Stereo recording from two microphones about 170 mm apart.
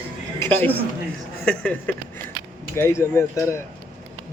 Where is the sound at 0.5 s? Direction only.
10° left (ahead or behind).